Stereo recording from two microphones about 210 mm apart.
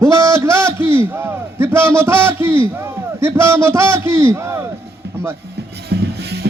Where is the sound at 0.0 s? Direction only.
15° right (ahead or behind).